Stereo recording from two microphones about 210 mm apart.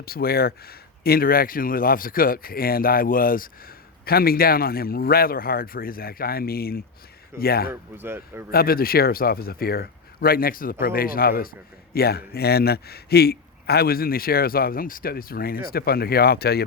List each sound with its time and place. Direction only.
0.0 s a man's voice: 45° left (ahead or behind)
7.7 s speech: 10° right (ahead or behind)
8.5 s a man's voice: 45° left (ahead or behind)